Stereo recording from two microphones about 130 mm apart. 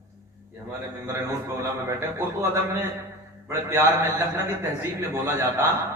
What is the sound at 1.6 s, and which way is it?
A man's voice, 20° right (ahead or behind).